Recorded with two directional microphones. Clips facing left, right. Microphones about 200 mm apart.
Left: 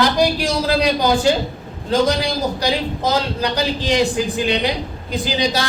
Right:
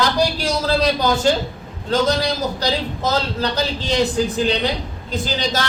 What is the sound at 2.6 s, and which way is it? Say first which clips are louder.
A man's voice: left 2 dB; 15° left (ahead or behind).